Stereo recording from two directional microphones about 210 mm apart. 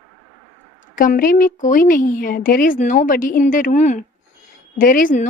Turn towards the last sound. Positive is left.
turn(degrees=40)  # may be behind; listen again after turning